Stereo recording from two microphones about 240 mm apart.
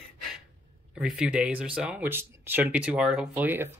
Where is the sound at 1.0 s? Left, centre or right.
Centre.